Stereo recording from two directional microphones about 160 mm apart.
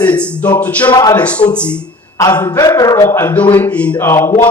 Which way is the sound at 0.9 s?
25° left (ahead or behind).